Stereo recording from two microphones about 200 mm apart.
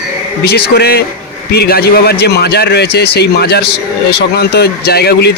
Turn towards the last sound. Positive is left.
turn(degrees=55)  # may be behind; listen again after turning